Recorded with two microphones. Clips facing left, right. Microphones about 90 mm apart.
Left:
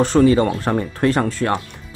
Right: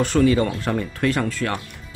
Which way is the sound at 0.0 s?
35° left (ahead or behind).